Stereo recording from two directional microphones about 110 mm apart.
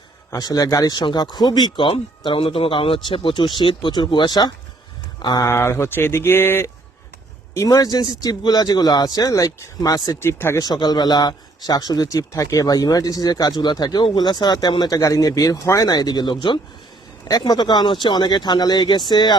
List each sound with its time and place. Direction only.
0.3 s speech: 35° left (ahead or behind)
5.5 s speech: 20° left (ahead or behind)
7.5 s speech: 30° left (ahead or behind)
10.6 s speech: 40° left (ahead or behind)
17.2 s speech: 35° left (ahead or behind)